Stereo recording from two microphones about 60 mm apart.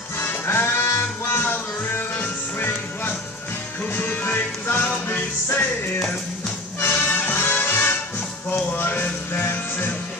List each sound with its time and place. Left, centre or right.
0.2 s music: left
0.8 s music: left
1.3 s music: left
6.9 s music: left